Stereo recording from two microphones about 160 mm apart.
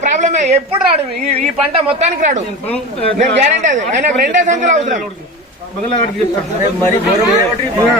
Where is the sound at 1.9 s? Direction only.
45° right (ahead or behind).